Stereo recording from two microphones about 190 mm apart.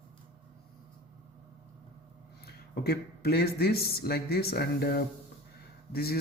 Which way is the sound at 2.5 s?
55° left (ahead or behind).